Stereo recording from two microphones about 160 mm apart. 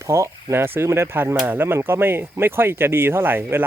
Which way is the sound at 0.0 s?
20° right (ahead or behind).